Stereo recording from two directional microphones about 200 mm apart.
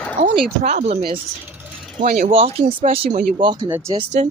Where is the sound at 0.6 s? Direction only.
40° right (ahead or behind).